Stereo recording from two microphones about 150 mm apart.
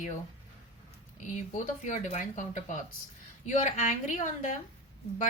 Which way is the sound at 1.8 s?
50° left (ahead or behind).